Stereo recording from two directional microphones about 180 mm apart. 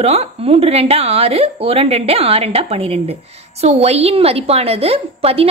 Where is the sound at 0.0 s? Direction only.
35° right (ahead or behind).